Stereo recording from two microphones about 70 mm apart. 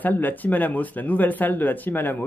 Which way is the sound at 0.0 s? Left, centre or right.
Left.